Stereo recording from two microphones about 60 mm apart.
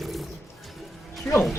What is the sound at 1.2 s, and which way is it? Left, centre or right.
Speech, left.